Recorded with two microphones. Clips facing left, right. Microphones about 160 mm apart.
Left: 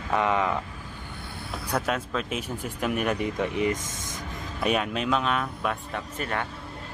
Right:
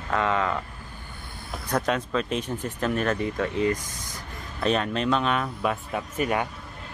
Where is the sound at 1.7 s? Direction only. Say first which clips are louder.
Right 3 dB; 5° left (ahead or behind).